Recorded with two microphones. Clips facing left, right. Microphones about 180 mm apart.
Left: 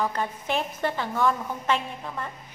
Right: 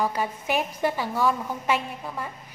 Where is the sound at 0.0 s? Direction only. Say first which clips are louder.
Right 1 dB; 10° right (ahead or behind).